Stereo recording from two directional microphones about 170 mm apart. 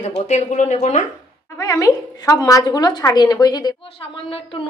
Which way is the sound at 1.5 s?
20° left (ahead or behind).